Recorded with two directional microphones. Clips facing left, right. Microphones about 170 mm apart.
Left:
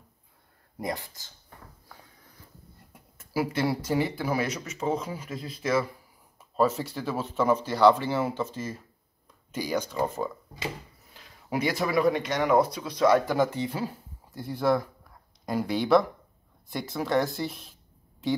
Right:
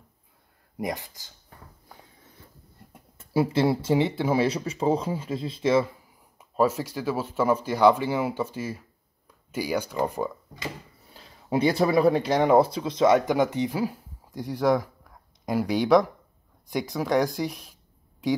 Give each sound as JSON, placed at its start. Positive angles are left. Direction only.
{"t": 0.7, "sound": "speech", "side_deg": -15}
{"t": 2.9, "sound": "speech", "side_deg": -25}
{"t": 6.3, "sound": "speech", "side_deg": -10}
{"t": 11.1, "sound": "speech", "side_deg": -30}